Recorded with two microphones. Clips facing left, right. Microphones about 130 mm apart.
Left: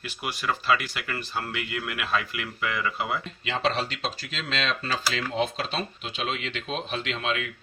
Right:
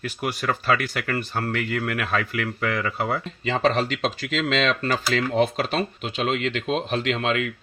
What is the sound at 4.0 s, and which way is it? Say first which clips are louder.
Speech: right 8 dB; 65° right (ahead or behind).